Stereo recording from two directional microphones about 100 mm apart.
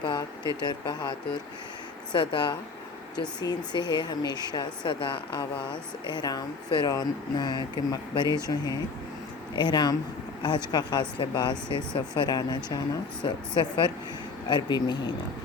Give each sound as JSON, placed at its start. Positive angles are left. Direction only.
{"t": 0.0, "sound": "a sound", "side_deg": 50}
{"t": 0.6, "sound": "speech", "side_deg": 45}
{"t": 2.1, "sound": "speech", "side_deg": 55}
{"t": 6.1, "sound": "speech", "side_deg": 45}